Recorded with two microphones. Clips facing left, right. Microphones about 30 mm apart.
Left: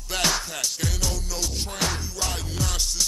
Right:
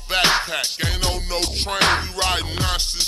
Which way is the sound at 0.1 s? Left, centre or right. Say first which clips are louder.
Right 7 dB; right.